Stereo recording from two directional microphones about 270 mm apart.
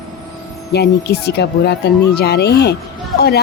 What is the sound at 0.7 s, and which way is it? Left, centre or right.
Speech, left.